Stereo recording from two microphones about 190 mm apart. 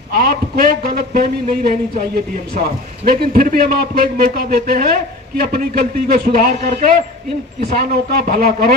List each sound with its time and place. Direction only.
0.1 s a man's voice: 55° right (ahead or behind)